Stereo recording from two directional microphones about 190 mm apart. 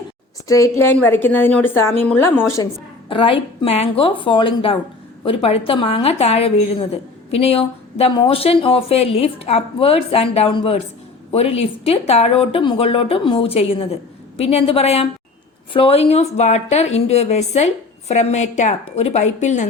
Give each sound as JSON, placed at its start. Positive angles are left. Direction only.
{"t": 0.4, "sound": "a woman's voice", "side_deg": 15}
{"t": 3.1, "sound": "a woman's voice", "side_deg": 30}